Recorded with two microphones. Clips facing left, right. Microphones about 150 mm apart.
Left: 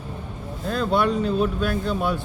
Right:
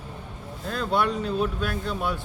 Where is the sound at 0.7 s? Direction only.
25° left (ahead or behind).